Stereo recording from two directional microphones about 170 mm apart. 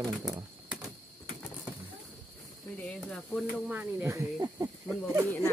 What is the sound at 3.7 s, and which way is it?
Speech, 10° right (ahead or behind).